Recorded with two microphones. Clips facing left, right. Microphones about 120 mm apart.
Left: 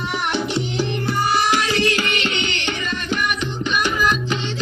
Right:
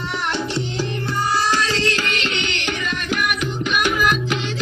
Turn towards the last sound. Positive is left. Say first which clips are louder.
# right 1 dB
turn(degrees=-5)  # may be behind; listen again after turning